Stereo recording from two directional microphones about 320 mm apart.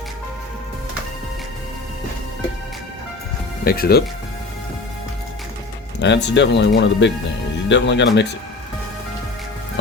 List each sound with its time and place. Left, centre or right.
3.6 s speech: left
6.0 s speech: left